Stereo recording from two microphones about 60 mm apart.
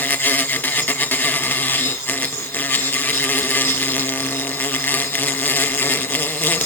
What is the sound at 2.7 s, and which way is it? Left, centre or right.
Insect, left.